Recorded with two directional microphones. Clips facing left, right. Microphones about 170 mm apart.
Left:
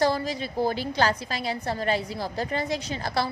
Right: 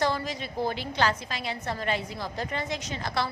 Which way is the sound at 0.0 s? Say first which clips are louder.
Left 4 dB; 35° left (ahead or behind).